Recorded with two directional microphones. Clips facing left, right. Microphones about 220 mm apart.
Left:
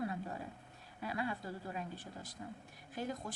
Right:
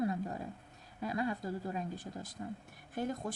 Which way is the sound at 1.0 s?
45° right (ahead or behind).